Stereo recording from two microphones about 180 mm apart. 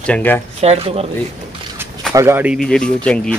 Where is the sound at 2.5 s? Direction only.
5° left (ahead or behind).